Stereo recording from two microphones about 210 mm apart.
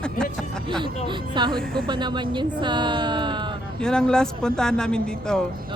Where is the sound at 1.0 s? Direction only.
20° right (ahead or behind).